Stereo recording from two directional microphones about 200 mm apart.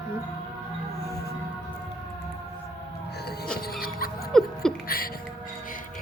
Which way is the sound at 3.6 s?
50° left (ahead or behind).